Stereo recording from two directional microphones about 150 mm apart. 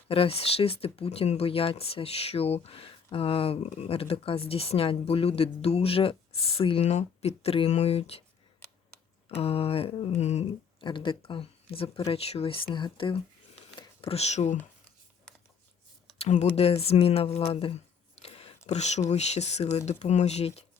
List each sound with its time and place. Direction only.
0.1 s speech: 40° left (ahead or behind)
9.3 s speech: 40° left (ahead or behind)
10.8 s speech: 35° left (ahead or behind); by 14.6 s 50° left (ahead or behind)
16.1 s speech: 45° left (ahead or behind)